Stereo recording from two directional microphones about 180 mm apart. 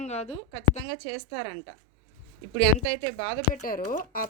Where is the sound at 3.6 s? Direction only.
50° left (ahead or behind).